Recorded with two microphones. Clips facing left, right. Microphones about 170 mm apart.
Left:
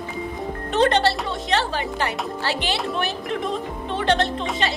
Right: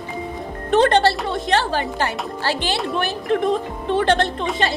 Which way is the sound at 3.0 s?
55° right (ahead or behind).